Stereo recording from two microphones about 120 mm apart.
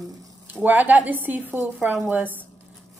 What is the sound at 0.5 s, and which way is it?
Speech, 15° right (ahead or behind).